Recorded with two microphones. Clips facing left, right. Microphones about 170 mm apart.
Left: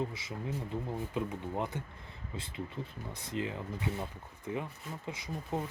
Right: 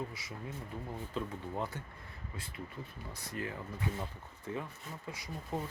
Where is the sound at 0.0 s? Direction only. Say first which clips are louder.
Left 5 dB; 25° left (ahead or behind).